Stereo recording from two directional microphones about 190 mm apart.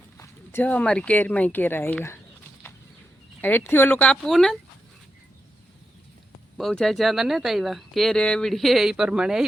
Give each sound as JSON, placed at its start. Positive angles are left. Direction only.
{"t": 0.2, "sound": "speech", "side_deg": 10}
{"t": 3.4, "sound": "speech", "side_deg": 10}
{"t": 6.6, "sound": "speech", "side_deg": 0}